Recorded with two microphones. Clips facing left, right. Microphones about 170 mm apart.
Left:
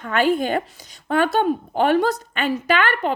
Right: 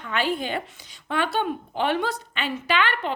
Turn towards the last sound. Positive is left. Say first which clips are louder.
# left 4 dB
turn(degrees=45)  # may be behind; listen again after turning